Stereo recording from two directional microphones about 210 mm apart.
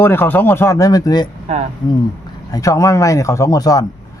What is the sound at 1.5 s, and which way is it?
Speech, 30° right (ahead or behind).